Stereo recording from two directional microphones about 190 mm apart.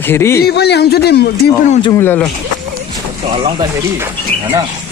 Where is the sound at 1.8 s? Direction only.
15° left (ahead or behind).